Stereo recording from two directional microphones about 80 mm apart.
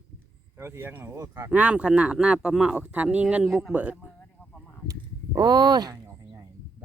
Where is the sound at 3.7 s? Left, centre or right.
Centre.